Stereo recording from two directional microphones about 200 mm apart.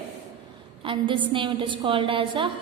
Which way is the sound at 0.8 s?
25° right (ahead or behind).